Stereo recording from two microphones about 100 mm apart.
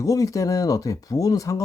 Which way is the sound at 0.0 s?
35° left (ahead or behind).